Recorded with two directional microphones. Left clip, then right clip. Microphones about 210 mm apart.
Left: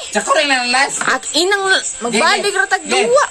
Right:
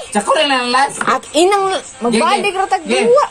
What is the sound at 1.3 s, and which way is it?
Speech, 45° left (ahead or behind).